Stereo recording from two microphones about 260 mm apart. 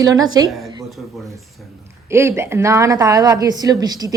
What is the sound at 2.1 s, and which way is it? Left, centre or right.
A woman's voice, centre.